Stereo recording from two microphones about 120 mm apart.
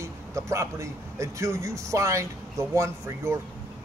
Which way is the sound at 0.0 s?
25° right (ahead or behind).